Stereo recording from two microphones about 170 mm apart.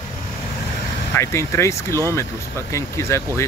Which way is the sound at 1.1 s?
15° left (ahead or behind).